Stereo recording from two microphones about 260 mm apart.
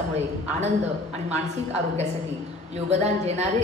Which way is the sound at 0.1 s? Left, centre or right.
Right.